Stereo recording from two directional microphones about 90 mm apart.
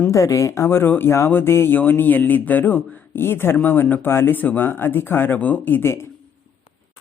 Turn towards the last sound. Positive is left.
turn(degrees=30)  # may be behind; listen again after turning